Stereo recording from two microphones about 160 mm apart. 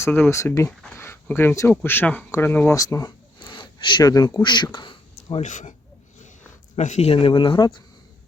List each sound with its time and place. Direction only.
0.0 s speech: 15° left (ahead or behind)
5.1 s speech: 45° left (ahead or behind)
6.7 s speech: 45° left (ahead or behind); by 7.8 s 30° left (ahead or behind)